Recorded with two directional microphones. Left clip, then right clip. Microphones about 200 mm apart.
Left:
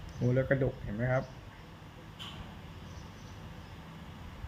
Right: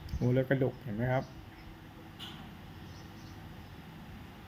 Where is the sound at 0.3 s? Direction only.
15° right (ahead or behind).